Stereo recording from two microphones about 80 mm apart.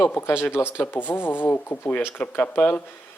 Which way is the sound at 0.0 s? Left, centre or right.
Left.